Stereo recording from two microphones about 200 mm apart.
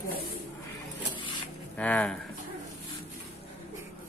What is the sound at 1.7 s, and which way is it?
Speech, 5° left (ahead or behind).